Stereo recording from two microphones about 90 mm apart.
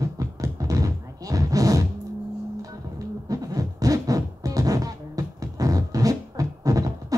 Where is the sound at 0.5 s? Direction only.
40° right (ahead or behind).